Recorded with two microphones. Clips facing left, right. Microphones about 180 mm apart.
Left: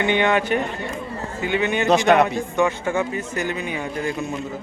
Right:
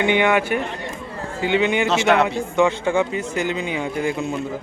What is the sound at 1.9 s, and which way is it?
Speech, 15° left (ahead or behind).